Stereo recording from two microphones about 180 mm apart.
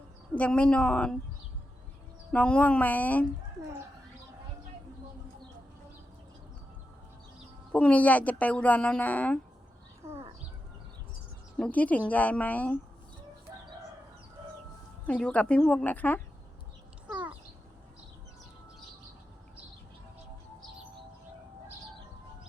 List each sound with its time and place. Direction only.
0.3 s speech: 5° left (ahead or behind)
2.3 s speech: 5° left (ahead or behind)
7.7 s speech: 5° left (ahead or behind)
11.5 s speech: 5° left (ahead or behind)
13.5 s chicken: 20° right (ahead or behind)
15.0 s speech: 5° left (ahead or behind)
17.1 s a sound: 10° right (ahead or behind)